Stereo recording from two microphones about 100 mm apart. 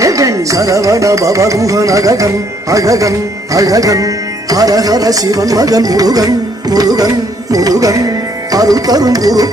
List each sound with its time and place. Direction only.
0.0 s music: 35° right (ahead or behind)